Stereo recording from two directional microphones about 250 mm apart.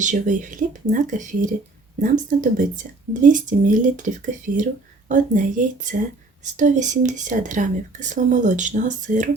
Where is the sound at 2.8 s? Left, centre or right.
Right.